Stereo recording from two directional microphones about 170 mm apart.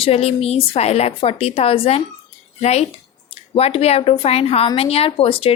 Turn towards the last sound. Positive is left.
turn(degrees=35)  # may be behind; listen again after turning